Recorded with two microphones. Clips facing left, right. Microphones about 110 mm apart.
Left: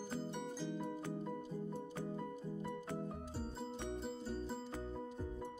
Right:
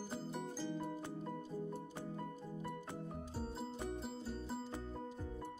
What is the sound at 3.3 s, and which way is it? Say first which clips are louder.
Music: right 3 dB; 5° right (ahead or behind).